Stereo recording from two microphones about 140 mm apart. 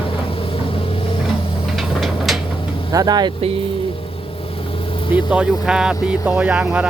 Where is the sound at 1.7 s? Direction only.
Centre (ahead or behind).